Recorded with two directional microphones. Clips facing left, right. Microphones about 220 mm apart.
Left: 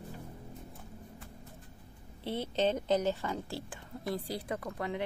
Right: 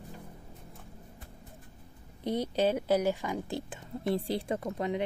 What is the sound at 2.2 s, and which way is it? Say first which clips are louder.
A woman's voice: right 3 dB; 15° right (ahead or behind).